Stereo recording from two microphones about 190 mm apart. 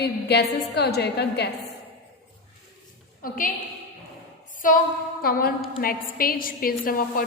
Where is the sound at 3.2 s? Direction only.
45° left (ahead or behind).